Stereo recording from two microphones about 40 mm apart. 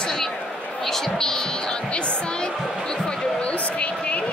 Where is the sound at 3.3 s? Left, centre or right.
Left.